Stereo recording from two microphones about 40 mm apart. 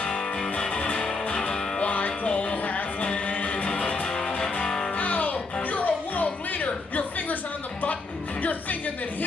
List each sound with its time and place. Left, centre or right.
0.6 s music: left
3.8 s music: left
4.9 s music: left